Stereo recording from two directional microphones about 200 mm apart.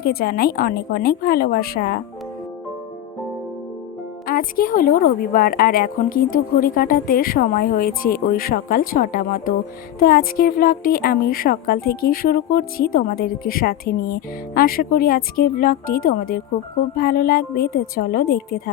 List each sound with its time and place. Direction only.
0.0 s speech: 50° left (ahead or behind)
4.3 s speech: 45° left (ahead or behind)